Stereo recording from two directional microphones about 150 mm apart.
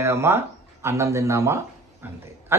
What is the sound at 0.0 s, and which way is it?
Speech, 15° right (ahead or behind).